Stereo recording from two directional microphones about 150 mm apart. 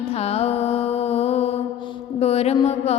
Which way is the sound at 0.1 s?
45° left (ahead or behind).